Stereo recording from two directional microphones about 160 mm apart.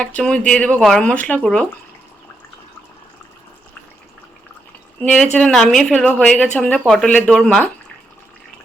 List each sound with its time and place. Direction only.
0.0 s speech: 5° left (ahead or behind)
4.9 s a woman's voice: 5° left (ahead or behind)